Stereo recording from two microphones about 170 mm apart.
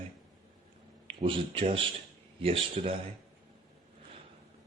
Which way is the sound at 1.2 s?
35° right (ahead or behind).